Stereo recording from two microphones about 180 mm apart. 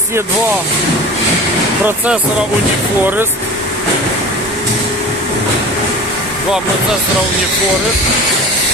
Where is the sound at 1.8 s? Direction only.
10° right (ahead or behind).